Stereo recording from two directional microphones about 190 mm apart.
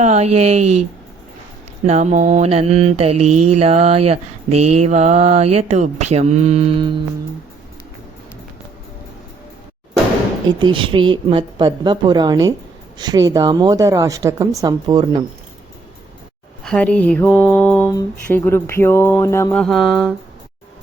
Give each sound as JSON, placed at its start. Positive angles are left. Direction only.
{"t": 0.0, "sound": "mantra", "side_deg": -35}
{"t": 1.9, "sound": "mantra", "side_deg": -35}
{"t": 10.6, "sound": "a woman's voice", "side_deg": -25}
{"t": 16.6, "sound": "speech", "side_deg": 5}
{"t": 19.6, "sound": "music", "side_deg": 0}